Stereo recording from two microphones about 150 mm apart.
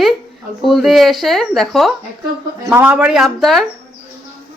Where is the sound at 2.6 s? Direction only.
10° right (ahead or behind).